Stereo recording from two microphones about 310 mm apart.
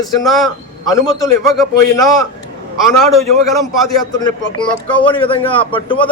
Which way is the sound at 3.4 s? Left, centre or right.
Centre.